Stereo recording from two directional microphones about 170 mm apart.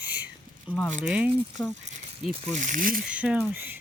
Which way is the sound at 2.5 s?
50° right (ahead or behind).